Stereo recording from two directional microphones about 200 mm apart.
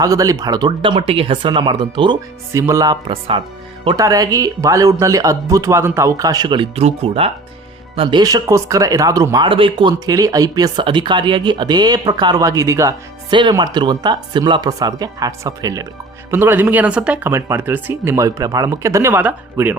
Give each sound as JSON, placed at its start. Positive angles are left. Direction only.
{"t": 0.0, "sound": "speech", "side_deg": -15}